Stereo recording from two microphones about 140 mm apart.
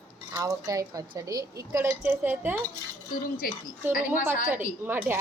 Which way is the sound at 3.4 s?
90° left.